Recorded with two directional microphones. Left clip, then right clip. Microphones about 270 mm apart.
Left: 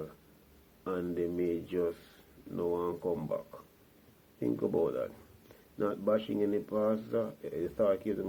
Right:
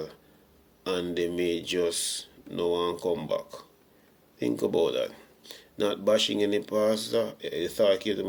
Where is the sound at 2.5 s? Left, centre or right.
Right.